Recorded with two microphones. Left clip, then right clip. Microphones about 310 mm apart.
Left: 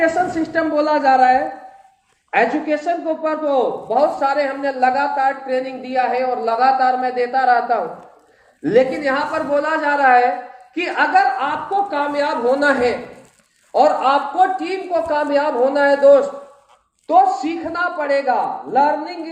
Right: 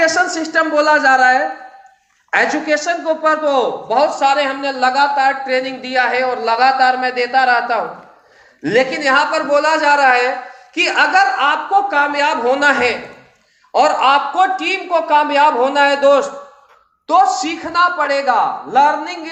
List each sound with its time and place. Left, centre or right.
0.0 s a man's voice: centre